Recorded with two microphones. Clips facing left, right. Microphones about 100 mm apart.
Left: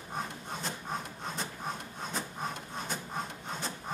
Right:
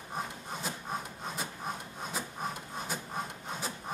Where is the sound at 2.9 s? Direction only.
5° right (ahead or behind).